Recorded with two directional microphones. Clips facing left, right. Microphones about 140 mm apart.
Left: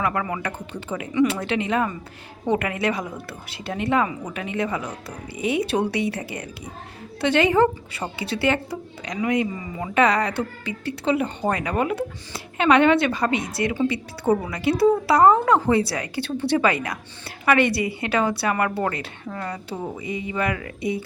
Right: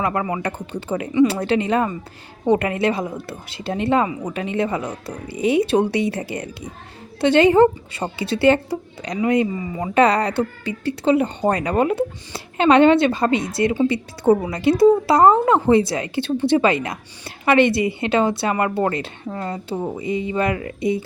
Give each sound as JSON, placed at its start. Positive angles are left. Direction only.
{"t": 0.0, "sound": "speech", "side_deg": -25}